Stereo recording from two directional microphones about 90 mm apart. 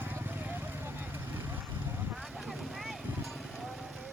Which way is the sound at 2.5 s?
Centre (ahead or behind).